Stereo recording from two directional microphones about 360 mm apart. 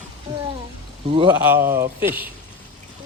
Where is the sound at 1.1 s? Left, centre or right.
Centre.